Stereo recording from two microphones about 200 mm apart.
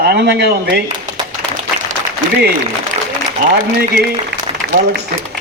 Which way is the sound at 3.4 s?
40° right (ahead or behind).